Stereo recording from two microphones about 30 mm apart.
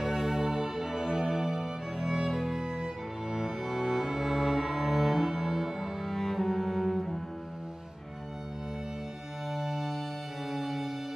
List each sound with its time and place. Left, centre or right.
0.0 s music: centre
2.6 s music: right
3.3 s cello: centre
6.0 s cello: centre
9.5 s music: centre